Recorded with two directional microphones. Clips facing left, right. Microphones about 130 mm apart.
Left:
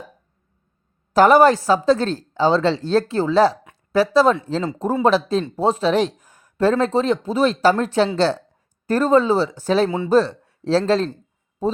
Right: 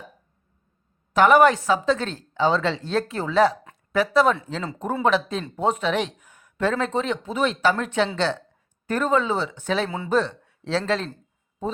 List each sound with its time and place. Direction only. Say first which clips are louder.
1.1 s speech: left 3 dB; 35° left (ahead or behind)